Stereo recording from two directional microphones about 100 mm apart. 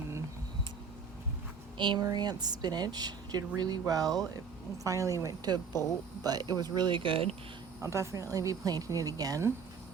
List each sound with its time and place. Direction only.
1.8 s a woman's voice: 45° right (ahead or behind); by 7.3 s 65° right (ahead or behind)
7.8 s a woman's voice: 30° right (ahead or behind)